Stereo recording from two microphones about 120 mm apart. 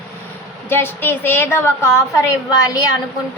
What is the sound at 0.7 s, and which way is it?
A woman's voice, 20° left (ahead or behind).